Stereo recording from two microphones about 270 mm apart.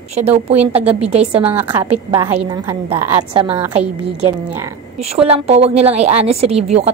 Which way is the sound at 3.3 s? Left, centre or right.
Right.